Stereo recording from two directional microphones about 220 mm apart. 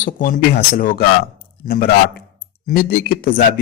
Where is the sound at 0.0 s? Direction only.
35° left (ahead or behind).